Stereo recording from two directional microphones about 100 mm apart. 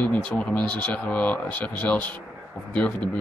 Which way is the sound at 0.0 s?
10° left (ahead or behind).